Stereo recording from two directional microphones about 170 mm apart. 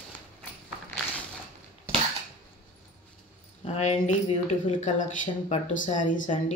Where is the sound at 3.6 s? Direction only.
40° left (ahead or behind).